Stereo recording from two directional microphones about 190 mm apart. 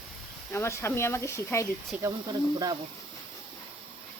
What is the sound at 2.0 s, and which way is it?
Speech, 20° right (ahead or behind).